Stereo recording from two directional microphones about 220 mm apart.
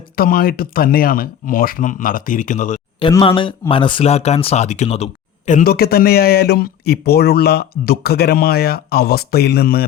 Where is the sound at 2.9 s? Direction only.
20° left (ahead or behind).